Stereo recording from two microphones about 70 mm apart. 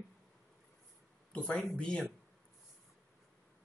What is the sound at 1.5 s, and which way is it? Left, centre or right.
Speech, centre.